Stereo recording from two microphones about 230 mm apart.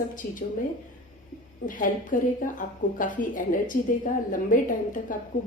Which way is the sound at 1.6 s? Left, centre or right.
Left.